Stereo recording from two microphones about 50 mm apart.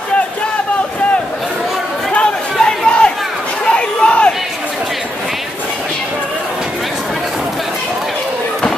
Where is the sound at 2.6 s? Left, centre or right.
Centre.